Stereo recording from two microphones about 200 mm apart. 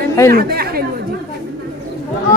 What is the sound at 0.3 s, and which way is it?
Speech, 50° right (ahead or behind).